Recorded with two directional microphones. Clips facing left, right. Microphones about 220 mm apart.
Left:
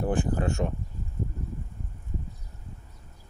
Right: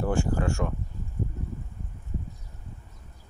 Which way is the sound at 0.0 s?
20° left (ahead or behind).